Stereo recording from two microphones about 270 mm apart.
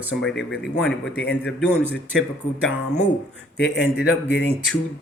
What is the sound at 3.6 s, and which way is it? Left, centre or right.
Speech, left.